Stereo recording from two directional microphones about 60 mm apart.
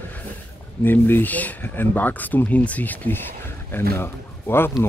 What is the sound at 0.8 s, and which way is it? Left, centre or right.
Speech, left.